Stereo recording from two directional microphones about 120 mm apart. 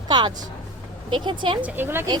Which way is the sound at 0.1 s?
40° right (ahead or behind).